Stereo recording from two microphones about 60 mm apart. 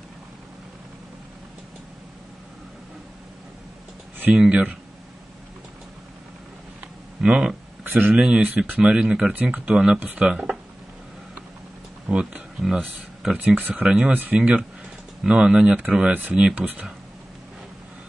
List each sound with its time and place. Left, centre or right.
4.3 s speech: centre
7.2 s speech: centre
8.4 s speech: centre
10.2 s speech: centre
12.1 s speech: centre
13.6 s speech: right
13.8 s speech: centre
14.1 s speech: right